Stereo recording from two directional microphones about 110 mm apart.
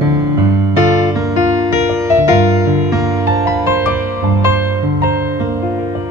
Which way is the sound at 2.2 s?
25° right (ahead or behind).